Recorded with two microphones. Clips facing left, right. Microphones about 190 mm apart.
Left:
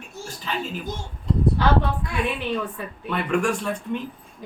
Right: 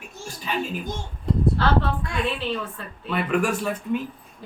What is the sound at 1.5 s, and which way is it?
Speech, 15° left (ahead or behind).